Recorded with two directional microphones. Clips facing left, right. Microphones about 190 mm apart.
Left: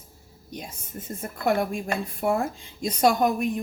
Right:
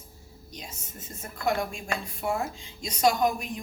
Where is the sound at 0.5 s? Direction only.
55° left (ahead or behind).